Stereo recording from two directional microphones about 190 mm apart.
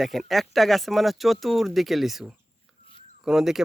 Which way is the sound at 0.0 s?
Centre (ahead or behind).